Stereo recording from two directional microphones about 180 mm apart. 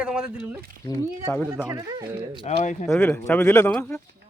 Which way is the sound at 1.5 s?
20° right (ahead or behind).